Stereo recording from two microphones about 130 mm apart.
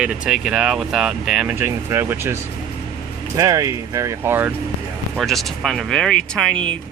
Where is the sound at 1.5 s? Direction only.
15° right (ahead or behind).